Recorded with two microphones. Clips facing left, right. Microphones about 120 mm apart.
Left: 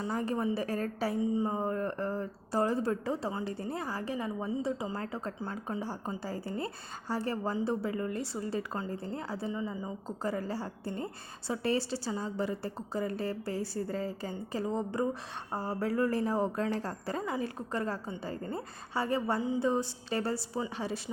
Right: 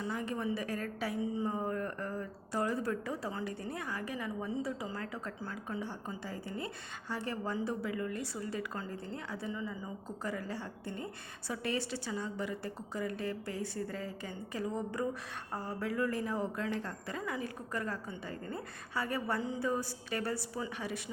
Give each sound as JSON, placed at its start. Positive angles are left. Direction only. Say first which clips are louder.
{"t": 0.0, "sound": "a woman's voice", "louder": "left 4 dB", "side_deg": 35}
{"t": 1.2, "sound": "speech", "louder": "left 6 dB", "side_deg": 20}
{"t": 1.5, "sound": "a woman's voice", "louder": "left 3 dB", "side_deg": 30}
{"t": 19.4, "sound": "a woman's voice", "louder": "left 5 dB", "side_deg": 15}
{"t": 19.6, "sound": "speech", "louder": "left 5 dB", "side_deg": 25}